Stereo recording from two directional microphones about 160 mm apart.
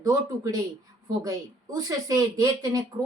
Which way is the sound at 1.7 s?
20° right (ahead or behind).